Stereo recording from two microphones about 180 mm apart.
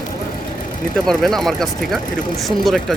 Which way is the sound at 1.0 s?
Centre (ahead or behind).